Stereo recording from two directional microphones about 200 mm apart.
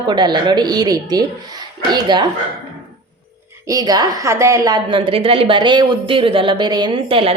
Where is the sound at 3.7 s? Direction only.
20° right (ahead or behind).